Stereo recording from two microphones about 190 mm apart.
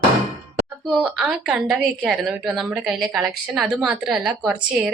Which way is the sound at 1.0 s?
Centre (ahead or behind).